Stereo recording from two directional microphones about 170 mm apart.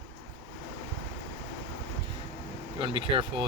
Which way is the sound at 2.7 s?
30° right (ahead or behind).